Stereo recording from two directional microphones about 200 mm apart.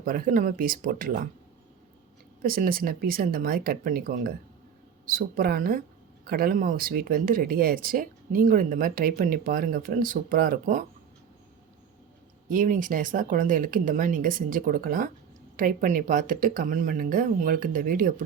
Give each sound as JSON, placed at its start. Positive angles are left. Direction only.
{"t": 0.0, "sound": "speech", "side_deg": -45}
{"t": 2.4, "sound": "speech", "side_deg": -45}
{"t": 12.5, "sound": "speech", "side_deg": -40}